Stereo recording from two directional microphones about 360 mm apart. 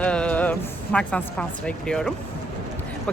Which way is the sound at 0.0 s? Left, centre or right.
Centre.